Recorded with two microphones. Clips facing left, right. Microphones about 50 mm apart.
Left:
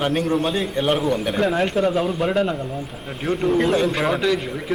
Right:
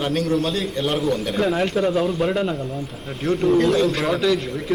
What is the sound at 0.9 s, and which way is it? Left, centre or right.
Speech, centre.